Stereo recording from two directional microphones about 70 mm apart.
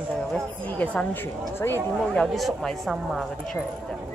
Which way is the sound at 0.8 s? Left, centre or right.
Centre.